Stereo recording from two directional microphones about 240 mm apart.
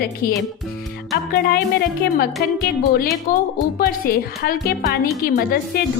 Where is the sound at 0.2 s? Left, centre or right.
Left.